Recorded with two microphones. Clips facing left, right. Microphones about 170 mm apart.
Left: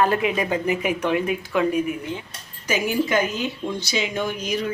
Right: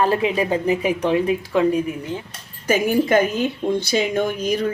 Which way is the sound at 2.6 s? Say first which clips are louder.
Right 5 dB; 55° right (ahead or behind).